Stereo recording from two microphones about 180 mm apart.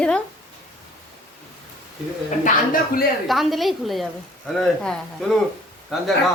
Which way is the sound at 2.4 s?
50° left (ahead or behind).